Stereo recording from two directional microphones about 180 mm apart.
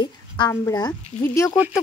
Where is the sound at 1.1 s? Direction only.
45° left (ahead or behind).